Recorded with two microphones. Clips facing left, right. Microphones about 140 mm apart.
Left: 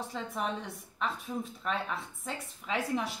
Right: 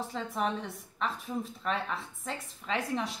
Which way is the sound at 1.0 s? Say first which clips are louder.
Right 1 dB; centre (ahead or behind).